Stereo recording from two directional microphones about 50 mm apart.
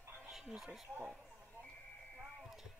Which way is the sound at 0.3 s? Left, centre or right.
Centre.